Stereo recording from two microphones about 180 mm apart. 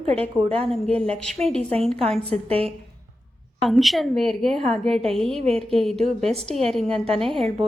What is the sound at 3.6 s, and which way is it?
Speech, centre (ahead or behind).